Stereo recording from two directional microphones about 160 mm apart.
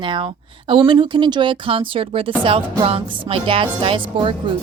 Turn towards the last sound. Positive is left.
turn(degrees=-30)  # may be behind; listen again after turning